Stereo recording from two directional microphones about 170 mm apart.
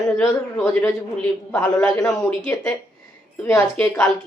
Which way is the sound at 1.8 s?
20° left (ahead or behind).